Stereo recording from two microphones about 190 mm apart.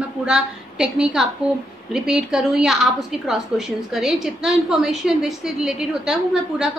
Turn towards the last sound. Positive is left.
turn(degrees=-5)  # may be behind; listen again after turning